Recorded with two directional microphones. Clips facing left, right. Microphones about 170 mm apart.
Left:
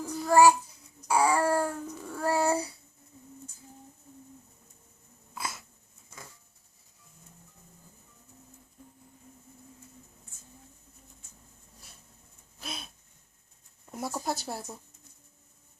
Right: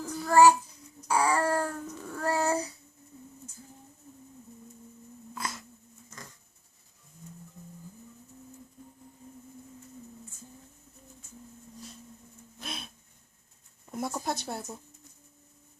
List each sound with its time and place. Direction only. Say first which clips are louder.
0.0 s child singing: even; 10° left (ahead or behind)
1.0 s babbling: left 1 dB; 10° left (ahead or behind)
5.3 s wheeze: right 1 dB; 10° left (ahead or behind)
6.1 s a sound: right 1 dB; 10° left (ahead or behind)
12.5 s gasp: even; 5° left (ahead or behind)
13.9 s speech: right 1 dB; 5° left (ahead or behind)